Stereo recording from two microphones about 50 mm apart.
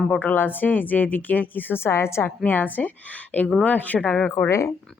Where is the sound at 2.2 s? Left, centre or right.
Left.